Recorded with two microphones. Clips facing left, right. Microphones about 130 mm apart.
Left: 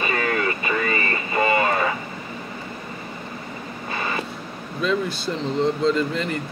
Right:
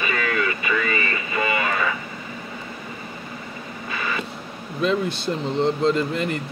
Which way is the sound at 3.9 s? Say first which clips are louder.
Left 1 dB; 35° left (ahead or behind).